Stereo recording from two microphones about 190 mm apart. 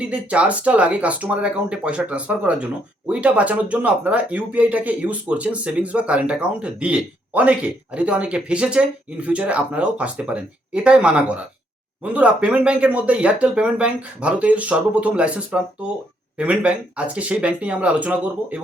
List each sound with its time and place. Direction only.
0.0 s speech: 5° right (ahead or behind)